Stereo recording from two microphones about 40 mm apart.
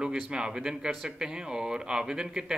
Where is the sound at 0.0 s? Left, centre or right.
Right.